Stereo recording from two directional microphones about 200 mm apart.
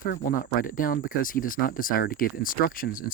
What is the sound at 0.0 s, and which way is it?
Speech, 45° left (ahead or behind).